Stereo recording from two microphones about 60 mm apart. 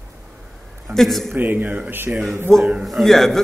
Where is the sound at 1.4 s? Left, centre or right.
Right.